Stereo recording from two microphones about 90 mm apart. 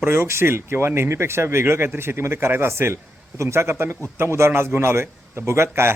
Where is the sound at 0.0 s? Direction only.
25° right (ahead or behind).